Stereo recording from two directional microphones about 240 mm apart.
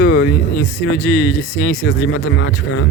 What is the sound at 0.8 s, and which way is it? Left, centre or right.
Speech, left.